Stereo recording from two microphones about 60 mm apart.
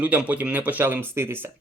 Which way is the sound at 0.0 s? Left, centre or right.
Right.